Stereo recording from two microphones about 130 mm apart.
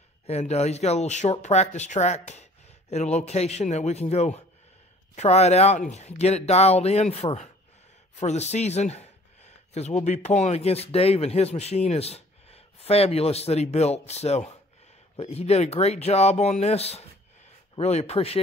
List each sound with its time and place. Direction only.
0.3 s speech: 55° left (ahead or behind)